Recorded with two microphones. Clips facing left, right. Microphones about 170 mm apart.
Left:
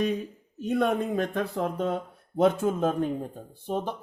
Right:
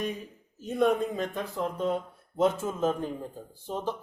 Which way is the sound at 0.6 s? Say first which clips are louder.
Even; 70° left (ahead or behind).